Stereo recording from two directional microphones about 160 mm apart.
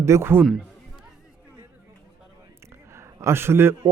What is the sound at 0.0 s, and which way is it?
Speech, 15° right (ahead or behind).